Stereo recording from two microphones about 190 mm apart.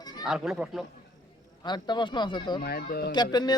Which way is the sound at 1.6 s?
25° left (ahead or behind).